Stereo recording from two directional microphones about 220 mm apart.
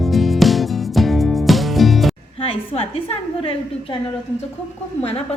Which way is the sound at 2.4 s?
25° left (ahead or behind).